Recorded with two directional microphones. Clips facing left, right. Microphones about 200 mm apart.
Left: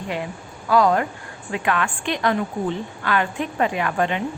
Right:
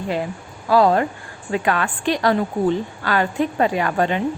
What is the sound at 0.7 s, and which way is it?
A woman's voice, 30° right (ahead or behind).